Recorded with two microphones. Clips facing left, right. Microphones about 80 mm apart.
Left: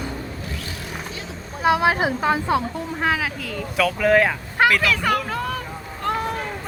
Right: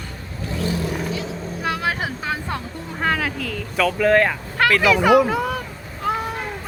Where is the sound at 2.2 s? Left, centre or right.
Centre.